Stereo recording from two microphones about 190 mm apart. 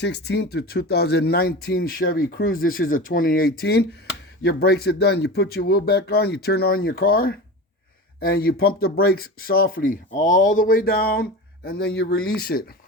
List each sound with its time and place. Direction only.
0.0 s speech: 60° left (ahead or behind)